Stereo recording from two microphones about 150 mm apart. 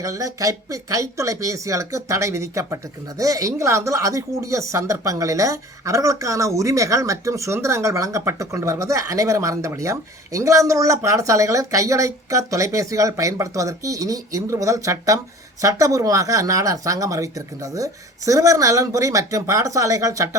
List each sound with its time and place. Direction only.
0.0 s speech: 20° right (ahead or behind)